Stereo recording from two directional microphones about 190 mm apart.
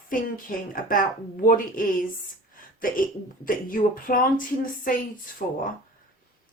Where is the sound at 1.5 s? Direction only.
45° left (ahead or behind).